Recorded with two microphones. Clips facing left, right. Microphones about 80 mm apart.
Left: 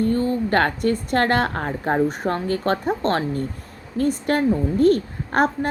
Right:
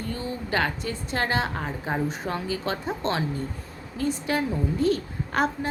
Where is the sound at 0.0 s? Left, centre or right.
Left.